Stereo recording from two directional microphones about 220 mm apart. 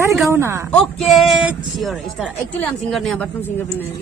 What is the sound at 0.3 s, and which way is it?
Speech, 10° right (ahead or behind).